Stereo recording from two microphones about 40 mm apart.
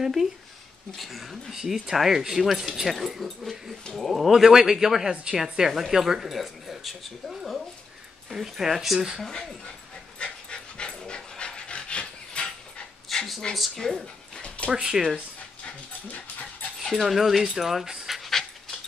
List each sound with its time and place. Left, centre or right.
0.0 s speech: centre
4.3 s a woman's voice: centre
5.4 s speech: centre
9.2 s speech: centre
10.1 s dog: left
13.1 s a sound: centre
13.6 s speech: centre
14.7 s speech: centre
16.9 s speech: centre